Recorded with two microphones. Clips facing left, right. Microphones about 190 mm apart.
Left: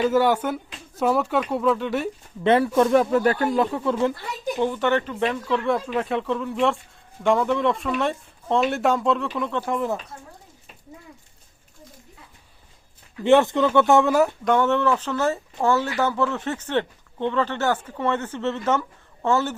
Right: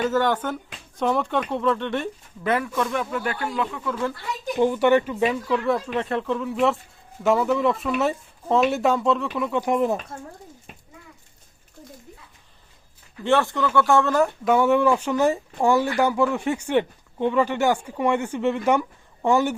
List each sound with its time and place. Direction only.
0.1 s speech: 10° left (ahead or behind)
2.4 s speech: 30° left (ahead or behind)
4.6 s speech: 10° right (ahead or behind)
13.2 s speech: 20° left (ahead or behind)
14.4 s speech: 10° right (ahead or behind)